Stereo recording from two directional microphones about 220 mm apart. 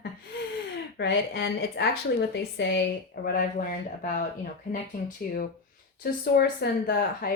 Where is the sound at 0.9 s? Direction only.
50° left (ahead or behind).